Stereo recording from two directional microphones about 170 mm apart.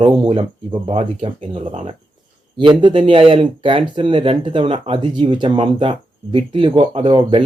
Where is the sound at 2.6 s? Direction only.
30° right (ahead or behind).